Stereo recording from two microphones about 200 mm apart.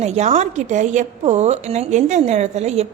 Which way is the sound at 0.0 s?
30° right (ahead or behind).